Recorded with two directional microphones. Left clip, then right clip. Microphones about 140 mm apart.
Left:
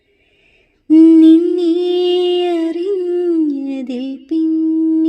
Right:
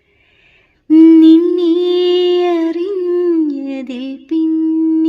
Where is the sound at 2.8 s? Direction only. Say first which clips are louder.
Right 1 dB; 30° left (ahead or behind).